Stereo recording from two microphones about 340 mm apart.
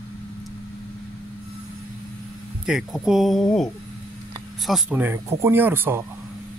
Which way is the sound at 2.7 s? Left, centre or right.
Centre.